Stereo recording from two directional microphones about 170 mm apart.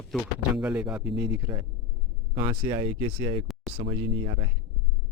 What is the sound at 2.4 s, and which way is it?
Speech, 30° right (ahead or behind).